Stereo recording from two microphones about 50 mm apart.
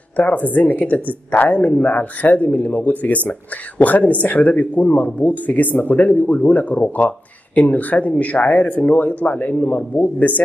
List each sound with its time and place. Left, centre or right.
0.2 s speech: left